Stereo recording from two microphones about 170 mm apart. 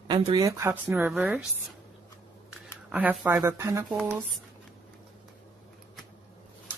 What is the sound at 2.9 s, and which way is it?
Speech, 10° right (ahead or behind).